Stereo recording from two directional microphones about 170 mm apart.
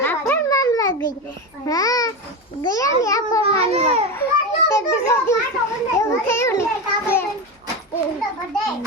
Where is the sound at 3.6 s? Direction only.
40° right (ahead or behind).